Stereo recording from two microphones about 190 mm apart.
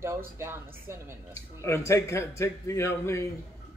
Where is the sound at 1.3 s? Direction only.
15° left (ahead or behind).